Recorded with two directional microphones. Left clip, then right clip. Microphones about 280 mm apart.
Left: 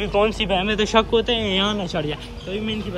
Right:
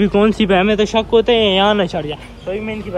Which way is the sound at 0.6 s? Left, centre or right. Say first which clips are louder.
Right 3 dB; centre.